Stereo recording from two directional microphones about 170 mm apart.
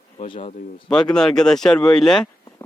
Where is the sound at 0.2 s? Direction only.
35° left (ahead or behind).